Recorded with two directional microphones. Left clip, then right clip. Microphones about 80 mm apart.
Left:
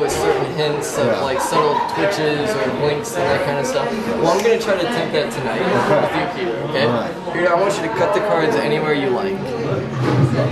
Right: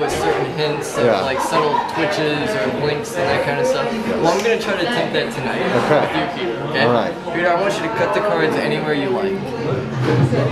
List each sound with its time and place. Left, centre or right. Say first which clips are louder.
4.2 s a man's voice: left 1 dB; left
8.4 s a man's voice: left 1 dB; centre